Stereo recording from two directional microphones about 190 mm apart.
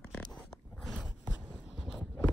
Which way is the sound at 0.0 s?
5° left (ahead or behind).